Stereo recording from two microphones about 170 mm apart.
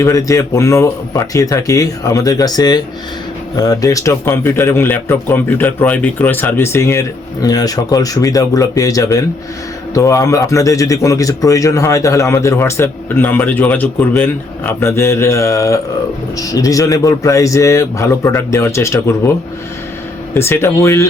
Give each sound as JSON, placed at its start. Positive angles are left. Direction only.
{"t": 0.0, "sound": "a man's voice", "side_deg": 20}
{"t": 20.3, "sound": "a man's voice", "side_deg": 15}